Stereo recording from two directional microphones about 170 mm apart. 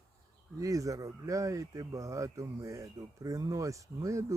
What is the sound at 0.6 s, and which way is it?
Speech, 20° right (ahead or behind).